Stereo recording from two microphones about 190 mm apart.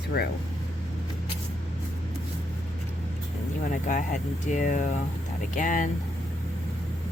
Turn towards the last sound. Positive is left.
turn(degrees=40)  # may be behind; listen again after turning